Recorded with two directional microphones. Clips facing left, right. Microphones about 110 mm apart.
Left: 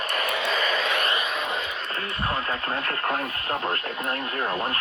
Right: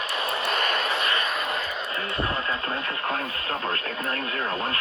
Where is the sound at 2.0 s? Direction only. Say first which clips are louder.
Right 5 dB; 30° right (ahead or behind).